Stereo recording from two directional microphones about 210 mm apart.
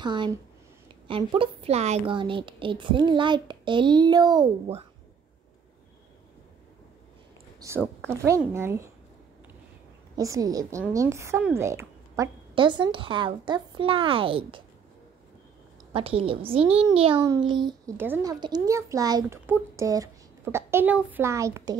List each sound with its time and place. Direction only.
0.0 s a woman's voice: 20° right (ahead or behind)
7.6 s a woman's voice: 15° right (ahead or behind)
10.1 s a child's voice: 15° right (ahead or behind)
15.9 s a woman's voice: 25° right (ahead or behind)
17.9 s a child's voice: 10° right (ahead or behind)